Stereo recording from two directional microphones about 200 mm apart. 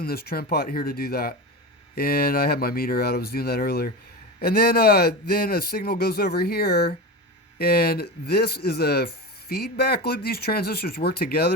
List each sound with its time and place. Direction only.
0.0 s speech: 50° left (ahead or behind)